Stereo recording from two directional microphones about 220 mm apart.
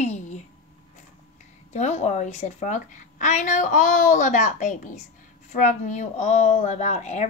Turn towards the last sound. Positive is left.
turn(degrees=30)  # may be behind; listen again after turning